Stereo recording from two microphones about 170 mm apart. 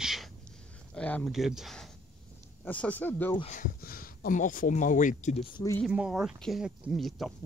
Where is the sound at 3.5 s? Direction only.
55° left (ahead or behind).